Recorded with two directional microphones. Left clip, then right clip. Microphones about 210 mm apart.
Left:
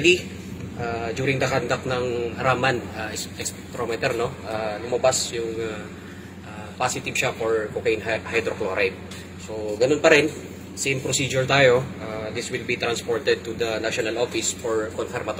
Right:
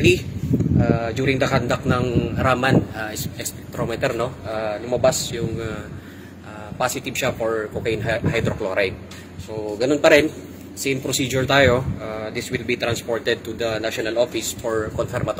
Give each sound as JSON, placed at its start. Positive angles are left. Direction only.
{"t": 0.1, "sound": "a sound", "side_deg": -50}
{"t": 1.4, "sound": "a man's voice", "side_deg": -50}
{"t": 6.8, "sound": "a man's voice", "side_deg": -50}